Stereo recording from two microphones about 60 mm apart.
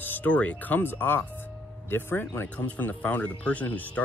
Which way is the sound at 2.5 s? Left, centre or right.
Left.